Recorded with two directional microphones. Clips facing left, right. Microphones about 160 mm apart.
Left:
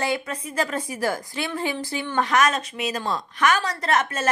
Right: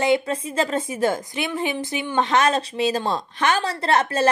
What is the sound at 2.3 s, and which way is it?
A woman's voice, 30° right (ahead or behind).